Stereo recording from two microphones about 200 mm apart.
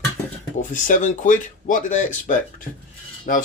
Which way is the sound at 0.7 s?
40° left (ahead or behind).